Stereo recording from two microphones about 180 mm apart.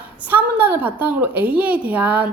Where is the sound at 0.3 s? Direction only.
10° right (ahead or behind).